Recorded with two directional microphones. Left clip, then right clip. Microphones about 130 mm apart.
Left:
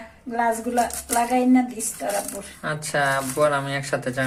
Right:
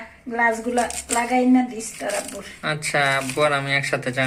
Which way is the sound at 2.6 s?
5° left (ahead or behind).